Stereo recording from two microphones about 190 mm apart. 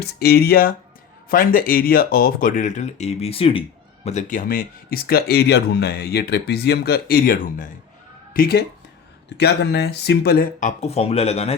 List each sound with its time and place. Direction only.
0.0 s speech: 55° left (ahead or behind); by 3.6 s 30° left (ahead or behind)
4.0 s speech: 40° left (ahead or behind)